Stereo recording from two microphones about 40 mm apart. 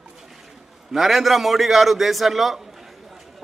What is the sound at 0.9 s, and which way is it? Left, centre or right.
A man's voice, centre.